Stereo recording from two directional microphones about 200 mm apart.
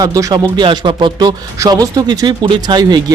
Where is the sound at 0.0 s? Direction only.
15° right (ahead or behind).